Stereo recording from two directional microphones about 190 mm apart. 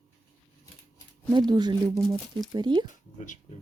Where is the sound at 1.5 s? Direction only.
20° right (ahead or behind).